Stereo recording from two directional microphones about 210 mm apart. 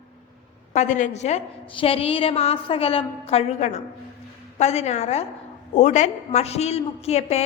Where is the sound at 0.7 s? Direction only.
35° left (ahead or behind).